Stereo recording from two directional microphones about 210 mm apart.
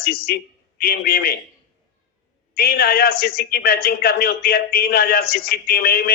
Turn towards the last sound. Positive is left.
turn(degrees=45)  # may be behind; listen again after turning